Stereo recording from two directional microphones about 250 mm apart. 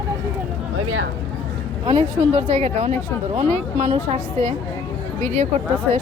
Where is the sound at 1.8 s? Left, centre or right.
Right.